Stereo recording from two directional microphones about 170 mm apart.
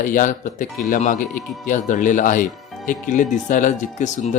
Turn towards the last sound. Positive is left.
turn(degrees=45)  # may be behind; listen again after turning